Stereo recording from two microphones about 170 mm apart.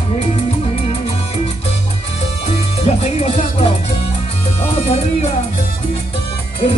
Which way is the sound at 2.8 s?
35° left (ahead or behind).